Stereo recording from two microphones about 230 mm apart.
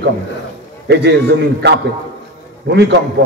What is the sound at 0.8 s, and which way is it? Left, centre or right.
A man's voice, right.